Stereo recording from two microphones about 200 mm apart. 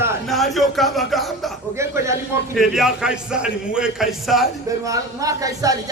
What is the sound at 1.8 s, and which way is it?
Speech, 15° right (ahead or behind).